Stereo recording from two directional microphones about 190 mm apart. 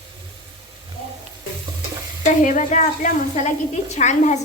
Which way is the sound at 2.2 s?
40° left (ahead or behind).